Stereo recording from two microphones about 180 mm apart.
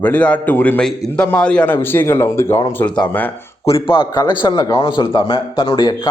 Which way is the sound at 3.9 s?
30° left (ahead or behind).